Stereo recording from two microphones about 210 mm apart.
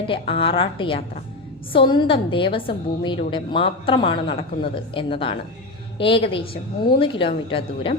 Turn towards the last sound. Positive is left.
turn(degrees=25)  # may be behind; listen again after turning